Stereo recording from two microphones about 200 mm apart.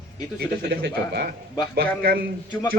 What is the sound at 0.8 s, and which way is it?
A man's voice, 50° right (ahead or behind).